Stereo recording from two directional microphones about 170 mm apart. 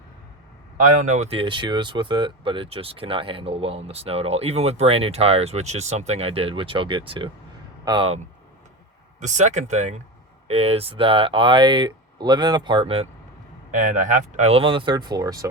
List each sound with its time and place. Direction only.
0.8 s speech: 45° right (ahead or behind); by 8.2 s 30° right (ahead or behind)
9.2 s speech: 45° right (ahead or behind)
13.7 s speech: 50° right (ahead or behind); by 15.4 s 20° right (ahead or behind)